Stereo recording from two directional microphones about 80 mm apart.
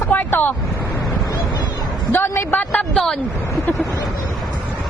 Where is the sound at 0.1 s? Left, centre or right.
Left.